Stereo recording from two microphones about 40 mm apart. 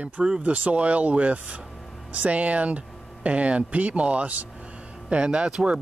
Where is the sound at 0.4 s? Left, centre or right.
Right.